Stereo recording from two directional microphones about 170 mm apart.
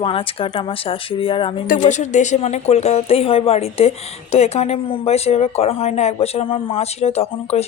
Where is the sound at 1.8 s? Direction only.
45° left (ahead or behind).